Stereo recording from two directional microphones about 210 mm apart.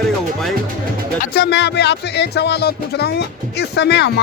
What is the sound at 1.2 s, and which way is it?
Speech, 50° left (ahead or behind).